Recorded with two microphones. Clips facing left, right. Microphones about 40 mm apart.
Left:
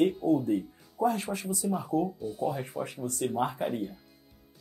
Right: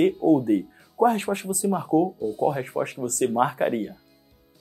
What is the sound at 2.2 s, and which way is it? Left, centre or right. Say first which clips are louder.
Speech: right 8 dB; centre.